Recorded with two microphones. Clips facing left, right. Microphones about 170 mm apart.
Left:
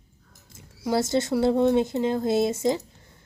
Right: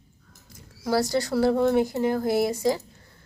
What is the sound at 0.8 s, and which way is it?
Speech, 20° left (ahead or behind).